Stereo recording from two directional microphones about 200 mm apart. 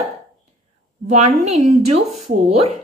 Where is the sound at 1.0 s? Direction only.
35° right (ahead or behind).